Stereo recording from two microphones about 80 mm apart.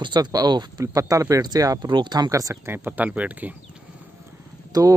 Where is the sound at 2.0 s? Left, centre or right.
Right.